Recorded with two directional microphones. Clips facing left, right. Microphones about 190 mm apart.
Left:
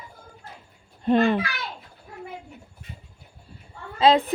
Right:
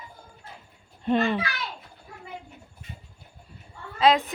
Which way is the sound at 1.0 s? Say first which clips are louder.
Left 4 dB; 40° left (ahead or behind).